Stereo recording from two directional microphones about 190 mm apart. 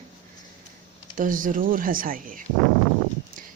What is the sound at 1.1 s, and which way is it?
A woman's voice, 45° right (ahead or behind).